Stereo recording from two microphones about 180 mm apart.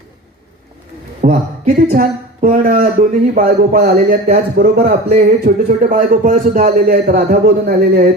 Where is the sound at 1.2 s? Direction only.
50° right (ahead or behind).